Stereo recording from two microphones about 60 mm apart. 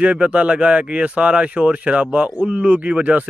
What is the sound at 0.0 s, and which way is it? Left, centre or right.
A man's voice, right.